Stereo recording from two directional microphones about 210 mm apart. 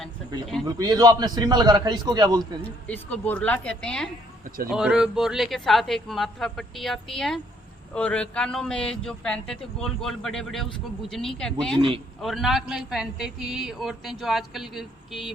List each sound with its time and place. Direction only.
0.8 s a man's voice: 20° right (ahead or behind)
2.8 s a woman's voice: 5° left (ahead or behind)
4.4 s speech: 45° right (ahead or behind)
4.7 s a man's voice: 5° right (ahead or behind)